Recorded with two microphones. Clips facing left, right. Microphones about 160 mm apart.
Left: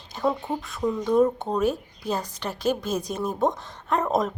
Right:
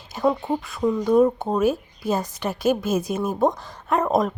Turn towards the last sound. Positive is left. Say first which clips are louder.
# right 3 dB
turn(degrees=0)  # may be behind; listen again after turning